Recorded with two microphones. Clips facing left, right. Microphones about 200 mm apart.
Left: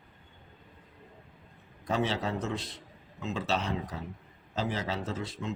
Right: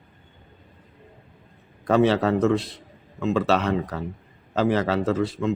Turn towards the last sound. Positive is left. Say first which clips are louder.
# right 12 dB
turn(degrees=-65)  # may be behind; listen again after turning